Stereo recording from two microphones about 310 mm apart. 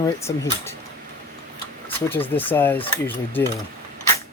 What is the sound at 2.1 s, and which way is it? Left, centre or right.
Speech, centre.